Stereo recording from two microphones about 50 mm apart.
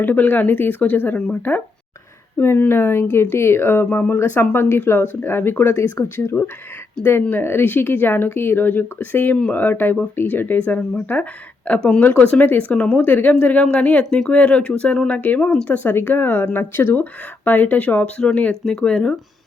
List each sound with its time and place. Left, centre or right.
0.0 s speech: left
2.4 s speech: left
6.3 s speech: left
13.0 s speech: left
18.6 s speech: centre